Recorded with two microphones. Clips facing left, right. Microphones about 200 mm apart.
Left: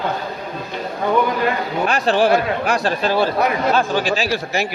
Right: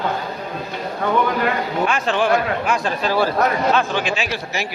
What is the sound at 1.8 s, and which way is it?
Speech, 35° left (ahead or behind).